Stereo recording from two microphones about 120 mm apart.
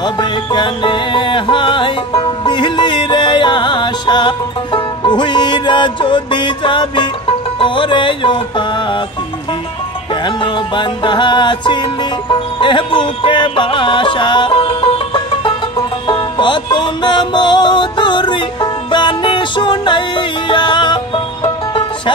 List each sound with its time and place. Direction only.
0.0 s music: 40° left (ahead or behind)
10.2 s music: 40° left (ahead or behind)